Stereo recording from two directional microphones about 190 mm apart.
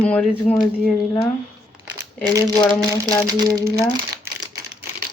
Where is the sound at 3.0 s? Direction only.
20° right (ahead or behind).